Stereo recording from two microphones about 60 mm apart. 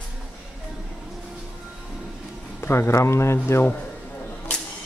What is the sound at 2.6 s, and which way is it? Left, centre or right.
Speech, left.